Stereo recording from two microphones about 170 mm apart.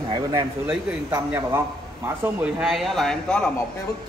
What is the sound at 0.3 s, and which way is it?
A man's voice, 20° right (ahead or behind).